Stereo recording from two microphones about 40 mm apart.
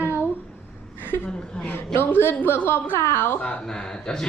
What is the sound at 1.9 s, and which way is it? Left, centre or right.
A woman's voice, left.